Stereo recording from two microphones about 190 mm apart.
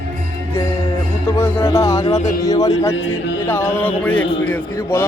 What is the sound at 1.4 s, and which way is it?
Speech, 15° left (ahead or behind).